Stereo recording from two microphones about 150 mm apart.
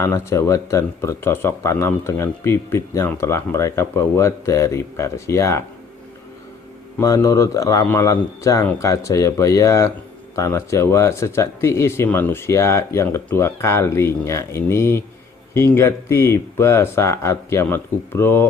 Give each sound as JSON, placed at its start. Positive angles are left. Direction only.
{"t": 0.0, "sound": "speech", "side_deg": 20}
{"t": 7.0, "sound": "speech", "side_deg": 20}